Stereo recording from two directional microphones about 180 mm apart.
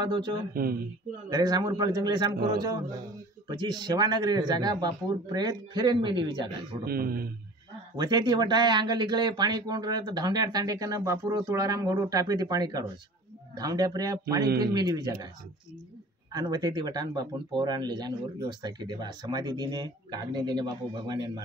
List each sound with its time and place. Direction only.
0.0 s speech: 25° right (ahead or behind)
6.8 s a man's voice: 55° right (ahead or behind)
7.9 s speech: 25° right (ahead or behind)
14.4 s a man's voice: 60° right (ahead or behind)
14.7 s speech: 20° right (ahead or behind)
16.3 s speech: 20° right (ahead or behind)